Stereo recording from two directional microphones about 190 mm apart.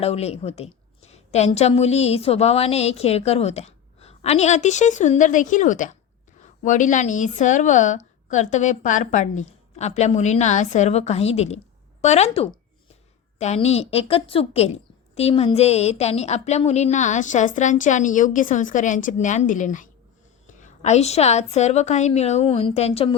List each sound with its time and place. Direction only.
0.0 s a woman's voice: 35° left (ahead or behind)